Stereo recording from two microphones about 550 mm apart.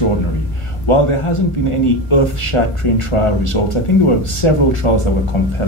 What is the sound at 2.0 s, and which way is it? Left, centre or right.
Speech, left.